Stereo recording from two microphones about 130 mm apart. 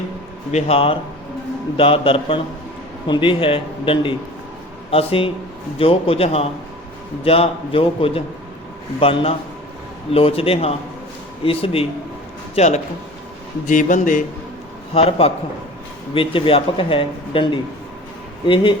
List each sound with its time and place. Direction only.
0.5 s a man's voice: 45° left (ahead or behind)
12.5 s speech: 60° left (ahead or behind)
13.7 s speech: 80° left
14.9 s a man's voice: 50° left (ahead or behind)